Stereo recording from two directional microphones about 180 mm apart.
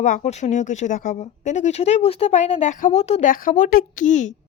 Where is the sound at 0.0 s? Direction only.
45° left (ahead or behind).